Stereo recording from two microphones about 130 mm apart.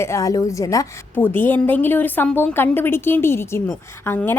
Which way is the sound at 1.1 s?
15° left (ahead or behind).